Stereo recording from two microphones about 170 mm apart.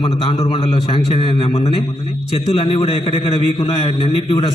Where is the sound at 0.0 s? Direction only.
30° left (ahead or behind).